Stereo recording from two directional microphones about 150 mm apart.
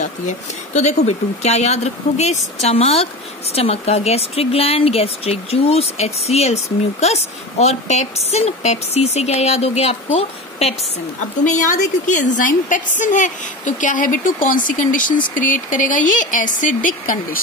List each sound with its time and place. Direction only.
0.0 s speech: 50° left (ahead or behind)
11.4 s a woman's voice: 55° left (ahead or behind)